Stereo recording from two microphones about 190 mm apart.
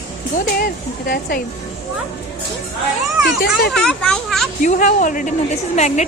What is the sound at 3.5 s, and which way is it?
Speech, centre (ahead or behind).